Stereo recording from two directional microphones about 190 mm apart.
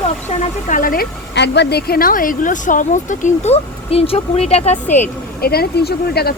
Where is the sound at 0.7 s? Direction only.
45° left (ahead or behind).